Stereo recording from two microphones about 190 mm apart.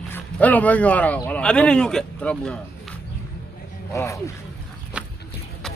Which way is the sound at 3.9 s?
15° left (ahead or behind).